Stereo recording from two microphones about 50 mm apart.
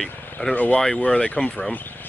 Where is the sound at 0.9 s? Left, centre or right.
Left.